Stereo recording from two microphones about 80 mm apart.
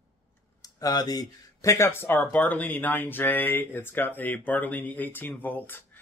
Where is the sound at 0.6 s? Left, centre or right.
Left.